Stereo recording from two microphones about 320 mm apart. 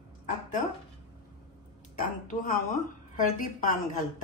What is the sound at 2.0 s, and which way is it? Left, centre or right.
A woman's voice, left.